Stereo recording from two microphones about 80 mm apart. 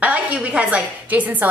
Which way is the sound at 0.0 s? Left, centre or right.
Centre.